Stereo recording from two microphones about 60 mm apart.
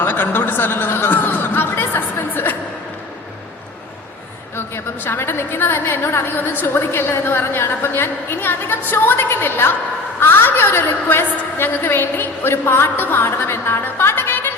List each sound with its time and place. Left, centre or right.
0.0 s speech: left
4.5 s a woman's voice: left